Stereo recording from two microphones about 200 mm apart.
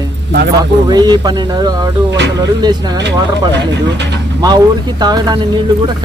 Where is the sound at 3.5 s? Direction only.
60° right (ahead or behind).